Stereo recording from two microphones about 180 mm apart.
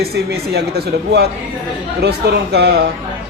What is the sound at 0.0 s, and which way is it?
A man's voice, 60° right (ahead or behind).